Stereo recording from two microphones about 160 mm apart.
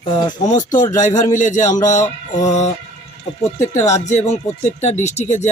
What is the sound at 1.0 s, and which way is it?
Speech, 50° left (ahead or behind).